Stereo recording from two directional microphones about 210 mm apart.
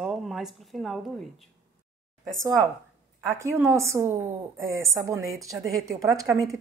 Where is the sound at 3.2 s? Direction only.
15° right (ahead or behind).